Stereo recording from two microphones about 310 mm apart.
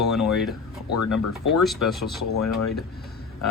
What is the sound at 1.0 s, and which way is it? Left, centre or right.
Speech, left.